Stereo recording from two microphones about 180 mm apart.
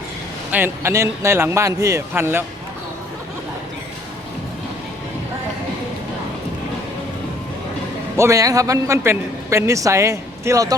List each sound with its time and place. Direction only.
0.5 s a man's voice: 15° right (ahead or behind)
8.1 s a man's voice: 15° right (ahead or behind)